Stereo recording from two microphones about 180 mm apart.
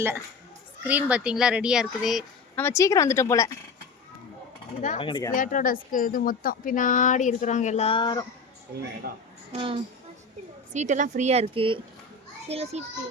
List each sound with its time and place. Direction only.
0.9 s speech: 10° right (ahead or behind)
2.6 s speech: 15° left (ahead or behind)
4.9 s speech: 25° left (ahead or behind)
5.3 s speech: 45° left (ahead or behind); by 8.2 s 25° left (ahead or behind)
9.5 s speech: 30° right (ahead or behind)
10.8 s a woman's voice: 45° right (ahead or behind)